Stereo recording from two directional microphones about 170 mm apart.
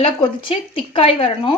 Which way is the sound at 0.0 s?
30° left (ahead or behind).